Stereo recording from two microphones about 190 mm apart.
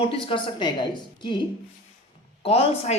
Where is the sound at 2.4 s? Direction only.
30° left (ahead or behind).